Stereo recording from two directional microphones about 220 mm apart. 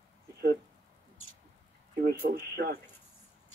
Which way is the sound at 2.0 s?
45° right (ahead or behind).